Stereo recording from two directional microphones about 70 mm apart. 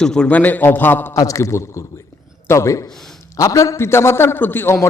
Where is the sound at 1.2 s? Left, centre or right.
Left.